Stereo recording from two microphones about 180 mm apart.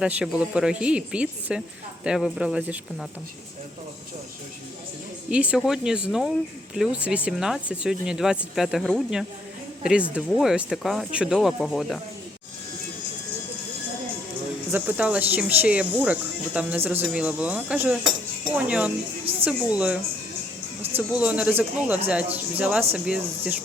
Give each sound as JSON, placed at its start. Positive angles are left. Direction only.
{"t": 0.0, "sound": "speech", "side_deg": -5}
{"t": 5.3, "sound": "speech", "side_deg": -5}
{"t": 14.7, "sound": "speech", "side_deg": -10}
{"t": 19.2, "sound": "a sound", "side_deg": -30}
{"t": 19.5, "sound": "speech", "side_deg": -5}